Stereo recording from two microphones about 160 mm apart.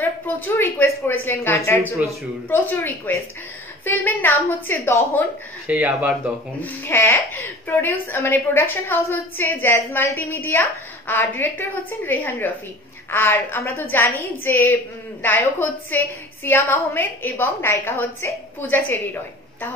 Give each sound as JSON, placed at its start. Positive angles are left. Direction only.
{"t": 0.6, "sound": "a woman's voice", "side_deg": 15}
{"t": 5.7, "sound": "speech", "side_deg": -10}
{"t": 6.6, "sound": "a woman's voice", "side_deg": 10}